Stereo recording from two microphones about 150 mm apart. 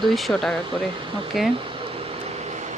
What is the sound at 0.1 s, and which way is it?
Speech, centre (ahead or behind).